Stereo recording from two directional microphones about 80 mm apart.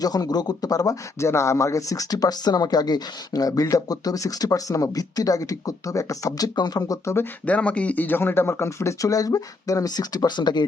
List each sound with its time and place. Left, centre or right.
0.0 s speech: left
7.4 s speech: centre; by 10.7 s left